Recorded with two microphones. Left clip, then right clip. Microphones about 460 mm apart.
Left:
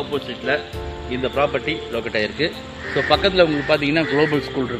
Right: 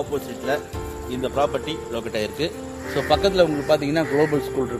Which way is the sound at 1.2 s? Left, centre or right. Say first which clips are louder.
Left 2 dB; right.